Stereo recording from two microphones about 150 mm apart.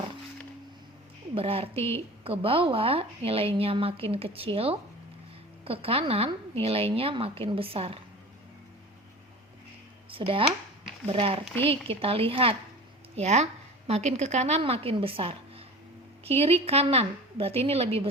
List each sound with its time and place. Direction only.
1.4 s a woman's voice: 40° right (ahead or behind)
10.1 s a woman's voice: 35° right (ahead or behind)